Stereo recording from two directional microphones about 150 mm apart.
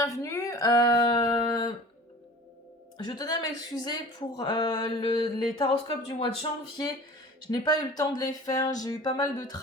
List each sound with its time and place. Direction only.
0.0 s speech: 20° left (ahead or behind)
3.0 s speech: 25° left (ahead or behind)
7.5 s speech: 25° left (ahead or behind)